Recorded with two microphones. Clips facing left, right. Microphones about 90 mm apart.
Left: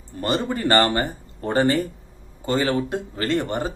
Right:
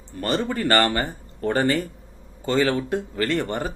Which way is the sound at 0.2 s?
20° left (ahead or behind).